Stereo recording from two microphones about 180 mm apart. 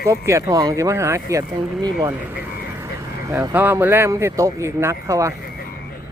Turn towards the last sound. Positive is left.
turn(degrees=-15)  # may be behind; listen again after turning